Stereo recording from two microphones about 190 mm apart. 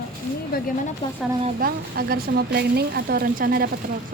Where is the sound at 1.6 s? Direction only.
50° right (ahead or behind).